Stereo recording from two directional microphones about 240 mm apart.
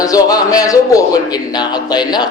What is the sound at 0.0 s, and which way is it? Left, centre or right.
A man's voice, centre.